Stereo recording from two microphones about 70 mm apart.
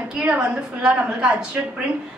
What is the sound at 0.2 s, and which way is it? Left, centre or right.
A woman's voice, centre.